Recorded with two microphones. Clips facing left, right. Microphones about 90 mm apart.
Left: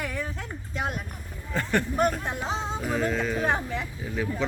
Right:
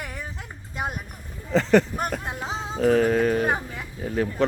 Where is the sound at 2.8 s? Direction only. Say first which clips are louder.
Right 10 dB; 65° right (ahead or behind).